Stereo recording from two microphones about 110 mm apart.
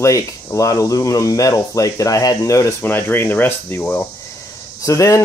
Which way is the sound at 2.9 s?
20° left (ahead or behind).